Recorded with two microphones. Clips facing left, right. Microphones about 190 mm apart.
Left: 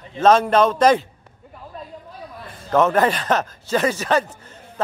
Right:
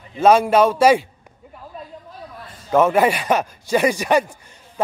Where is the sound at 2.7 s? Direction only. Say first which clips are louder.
Right 1 dB; 10° right (ahead or behind).